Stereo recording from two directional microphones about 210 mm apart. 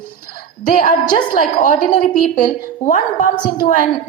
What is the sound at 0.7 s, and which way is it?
A woman's voice, 40° left (ahead or behind).